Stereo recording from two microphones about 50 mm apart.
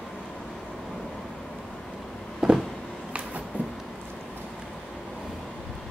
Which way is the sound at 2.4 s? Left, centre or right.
Centre.